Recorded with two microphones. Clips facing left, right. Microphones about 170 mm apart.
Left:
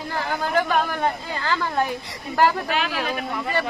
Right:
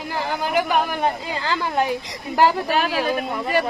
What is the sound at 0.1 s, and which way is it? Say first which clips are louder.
A woman's voice: right 1 dB; 15° right (ahead or behind).